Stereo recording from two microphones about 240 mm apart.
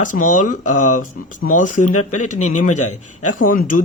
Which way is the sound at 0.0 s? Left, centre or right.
Left.